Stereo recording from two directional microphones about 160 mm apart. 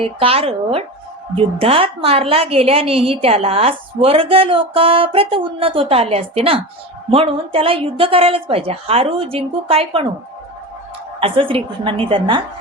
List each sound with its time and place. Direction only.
0.0 s a woman's voice: 35° right (ahead or behind)
11.2 s a woman's voice: 35° right (ahead or behind)